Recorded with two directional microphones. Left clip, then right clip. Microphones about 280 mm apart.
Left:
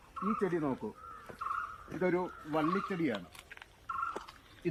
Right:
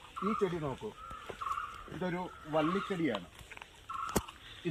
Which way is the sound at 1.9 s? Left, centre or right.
Right.